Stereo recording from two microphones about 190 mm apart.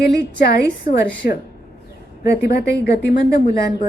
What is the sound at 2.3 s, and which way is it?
Speech, 55° left (ahead or behind).